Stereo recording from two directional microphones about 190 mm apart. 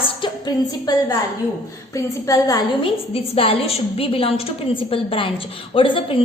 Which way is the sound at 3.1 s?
30° left (ahead or behind).